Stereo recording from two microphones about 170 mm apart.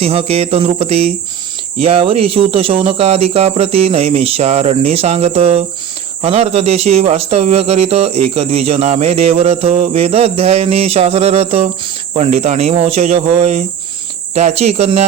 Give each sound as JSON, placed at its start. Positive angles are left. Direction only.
{"t": 0.0, "sound": "a man's voice", "side_deg": -35}